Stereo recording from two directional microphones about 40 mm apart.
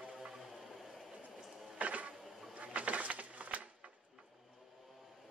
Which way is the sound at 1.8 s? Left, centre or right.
Right.